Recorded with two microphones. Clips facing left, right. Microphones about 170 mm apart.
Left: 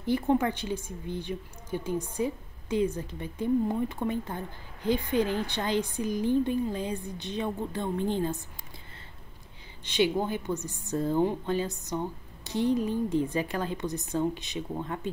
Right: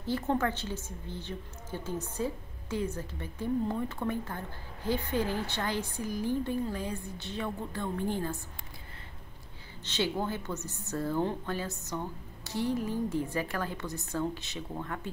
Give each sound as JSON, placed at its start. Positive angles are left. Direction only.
{"t": 0.0, "sound": "a woman's voice", "side_deg": 15}
{"t": 9.8, "sound": "a woman's voice", "side_deg": 15}